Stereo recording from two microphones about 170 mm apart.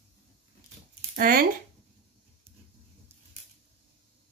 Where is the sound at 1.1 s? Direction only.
60° right (ahead or behind).